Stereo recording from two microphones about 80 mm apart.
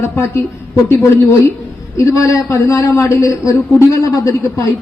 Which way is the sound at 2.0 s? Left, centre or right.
Left.